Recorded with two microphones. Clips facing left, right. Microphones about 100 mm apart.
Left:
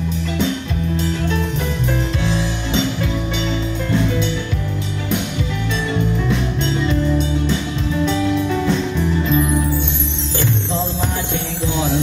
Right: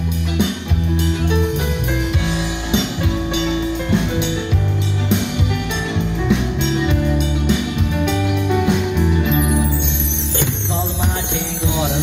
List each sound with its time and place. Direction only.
0.9 s music: 20° right (ahead or behind)
5.9 s music: 20° right (ahead or behind)
7.5 s music: 65° right (ahead or behind)
8.1 s music: 15° right (ahead or behind)